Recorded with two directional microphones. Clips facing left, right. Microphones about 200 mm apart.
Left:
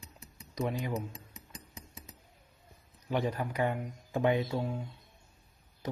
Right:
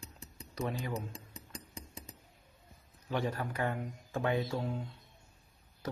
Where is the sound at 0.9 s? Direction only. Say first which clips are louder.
Left 3 dB; 30° right (ahead or behind).